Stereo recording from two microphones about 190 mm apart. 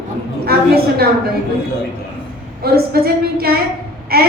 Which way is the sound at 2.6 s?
55° right (ahead or behind).